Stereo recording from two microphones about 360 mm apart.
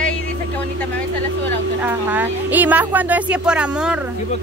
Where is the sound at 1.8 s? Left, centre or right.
Centre.